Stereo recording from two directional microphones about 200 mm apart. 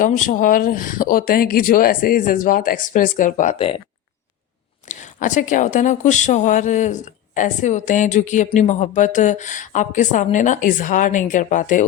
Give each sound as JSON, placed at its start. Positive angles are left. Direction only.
{"t": 0.0, "sound": "speech", "side_deg": 40}
{"t": 4.9, "sound": "a woman's voice", "side_deg": 35}